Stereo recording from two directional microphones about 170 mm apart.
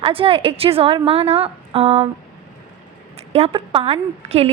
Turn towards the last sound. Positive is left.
turn(degrees=-35)  # may be behind; listen again after turning